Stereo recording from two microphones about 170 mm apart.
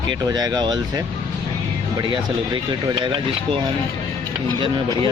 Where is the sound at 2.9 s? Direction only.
30° right (ahead or behind).